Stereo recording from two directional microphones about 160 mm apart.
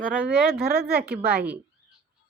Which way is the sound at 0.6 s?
70° right (ahead or behind).